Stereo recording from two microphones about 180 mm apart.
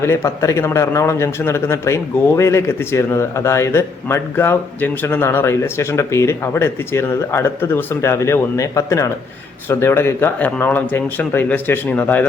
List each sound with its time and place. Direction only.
0.0 s a man's voice: 15° left (ahead or behind)